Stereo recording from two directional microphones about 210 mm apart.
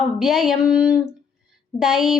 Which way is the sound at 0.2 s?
Centre (ahead or behind).